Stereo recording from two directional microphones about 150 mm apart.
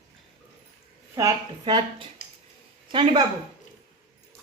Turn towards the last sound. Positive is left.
turn(degrees=-35)  # may be behind; listen again after turning